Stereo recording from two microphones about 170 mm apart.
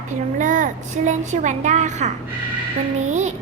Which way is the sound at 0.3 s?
50° right (ahead or behind).